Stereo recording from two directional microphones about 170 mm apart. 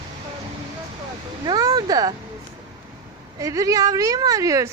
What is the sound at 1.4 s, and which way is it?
Speech, 25° right (ahead or behind).